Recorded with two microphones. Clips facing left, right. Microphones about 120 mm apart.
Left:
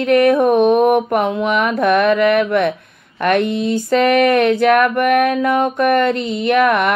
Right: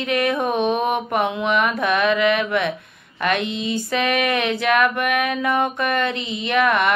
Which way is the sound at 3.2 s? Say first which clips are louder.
Left 7 dB; 55° left (ahead or behind).